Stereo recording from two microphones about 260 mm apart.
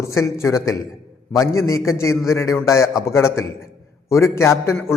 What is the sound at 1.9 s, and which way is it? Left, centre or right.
A man's voice, centre.